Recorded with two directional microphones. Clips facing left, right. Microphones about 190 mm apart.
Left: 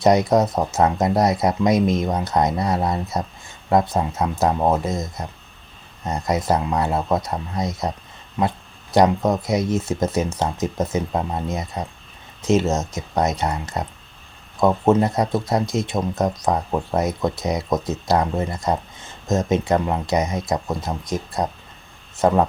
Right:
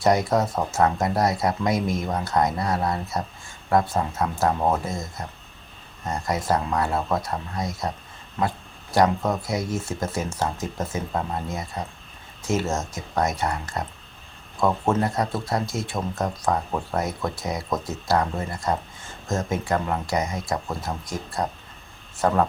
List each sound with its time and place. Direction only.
0.0 s speech: 20° left (ahead or behind)